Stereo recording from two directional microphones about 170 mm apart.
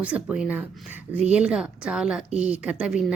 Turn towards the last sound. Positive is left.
turn(degrees=-5)  # may be behind; listen again after turning